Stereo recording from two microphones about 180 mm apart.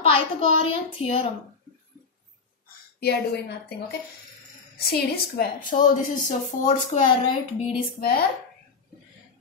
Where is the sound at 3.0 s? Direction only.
65° left (ahead or behind).